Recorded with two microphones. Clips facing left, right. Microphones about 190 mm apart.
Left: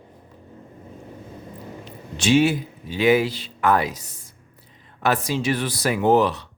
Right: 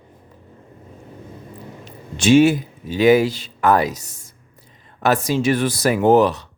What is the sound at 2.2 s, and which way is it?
Speech, 50° right (ahead or behind).